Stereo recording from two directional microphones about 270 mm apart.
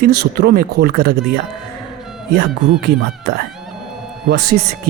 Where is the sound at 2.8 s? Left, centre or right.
Right.